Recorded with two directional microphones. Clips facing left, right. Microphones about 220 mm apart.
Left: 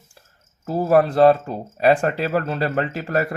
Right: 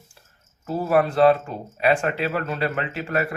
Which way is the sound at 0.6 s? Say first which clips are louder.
Left 3 dB; 40° left (ahead or behind).